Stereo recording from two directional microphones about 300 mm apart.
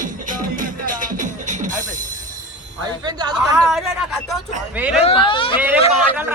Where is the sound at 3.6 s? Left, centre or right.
Centre.